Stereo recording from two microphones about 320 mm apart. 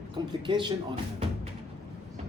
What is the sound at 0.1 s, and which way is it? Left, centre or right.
Speech, centre.